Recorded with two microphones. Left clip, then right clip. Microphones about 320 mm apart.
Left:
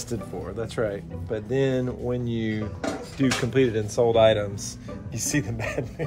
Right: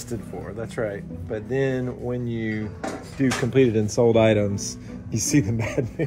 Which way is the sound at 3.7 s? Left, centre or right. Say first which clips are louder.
Right 2 dB; right.